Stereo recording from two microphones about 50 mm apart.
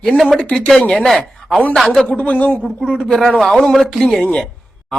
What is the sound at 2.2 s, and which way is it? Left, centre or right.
Speech, left.